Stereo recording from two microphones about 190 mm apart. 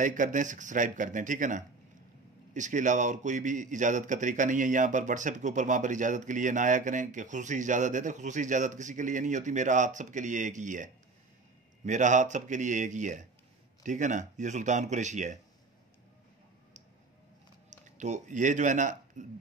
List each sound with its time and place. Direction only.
0.0 s a man's voice: 45° right (ahead or behind)
17.6 s speech: 40° right (ahead or behind)